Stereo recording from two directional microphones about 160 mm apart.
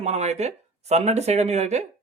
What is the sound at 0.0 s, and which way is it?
Speech, 45° right (ahead or behind).